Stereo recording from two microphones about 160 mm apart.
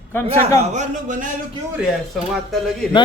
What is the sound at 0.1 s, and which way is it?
Speech, 15° left (ahead or behind).